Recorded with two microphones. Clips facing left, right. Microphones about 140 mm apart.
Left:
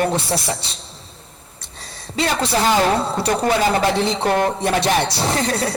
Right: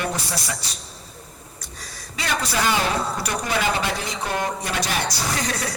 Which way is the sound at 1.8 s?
30° left (ahead or behind).